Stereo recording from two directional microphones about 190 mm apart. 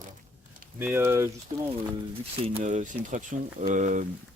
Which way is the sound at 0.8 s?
10° right (ahead or behind).